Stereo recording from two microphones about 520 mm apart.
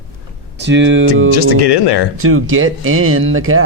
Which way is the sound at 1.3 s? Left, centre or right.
Left.